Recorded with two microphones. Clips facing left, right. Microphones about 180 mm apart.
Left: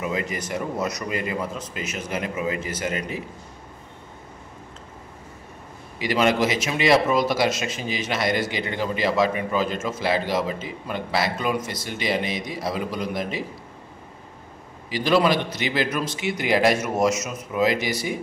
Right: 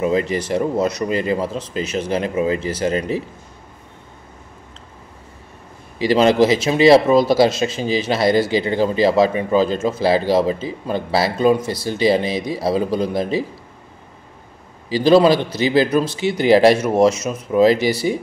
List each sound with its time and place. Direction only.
0.0 s speech: 30° right (ahead or behind)
5.9 s speech: 30° right (ahead or behind)
14.9 s speech: 30° right (ahead or behind)